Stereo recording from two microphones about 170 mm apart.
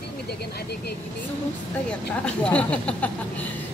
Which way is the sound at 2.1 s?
5° left (ahead or behind).